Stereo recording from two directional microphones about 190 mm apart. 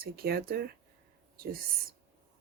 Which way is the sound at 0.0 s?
55° right (ahead or behind).